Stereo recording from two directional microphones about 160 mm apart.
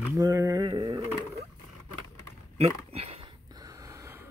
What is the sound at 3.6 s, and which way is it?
Gasp, 20° right (ahead or behind).